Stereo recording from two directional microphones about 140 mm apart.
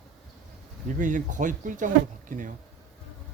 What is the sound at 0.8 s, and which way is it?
Speech, 65° right (ahead or behind).